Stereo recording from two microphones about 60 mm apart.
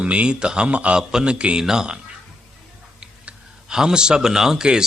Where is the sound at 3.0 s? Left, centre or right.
Centre.